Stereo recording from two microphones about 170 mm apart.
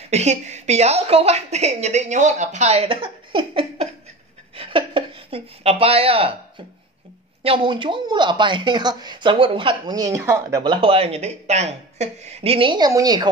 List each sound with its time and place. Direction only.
0.1 s a woman's voice: 40° right (ahead or behind)
4.6 s a sound: 30° right (ahead or behind)
7.4 s speech: 30° right (ahead or behind)
10.6 s a woman's voice: 30° right (ahead or behind)